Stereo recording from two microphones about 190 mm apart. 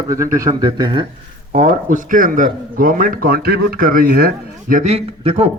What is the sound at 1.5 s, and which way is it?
A man's voice, 40° right (ahead or behind).